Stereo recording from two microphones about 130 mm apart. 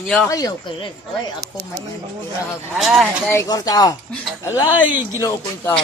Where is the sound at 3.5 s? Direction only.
30° left (ahead or behind).